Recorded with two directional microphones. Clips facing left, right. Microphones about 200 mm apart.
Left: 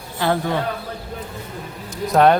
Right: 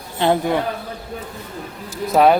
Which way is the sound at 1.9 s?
5° right (ahead or behind).